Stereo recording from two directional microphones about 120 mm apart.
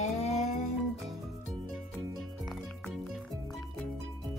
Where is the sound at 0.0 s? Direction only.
60° left (ahead or behind).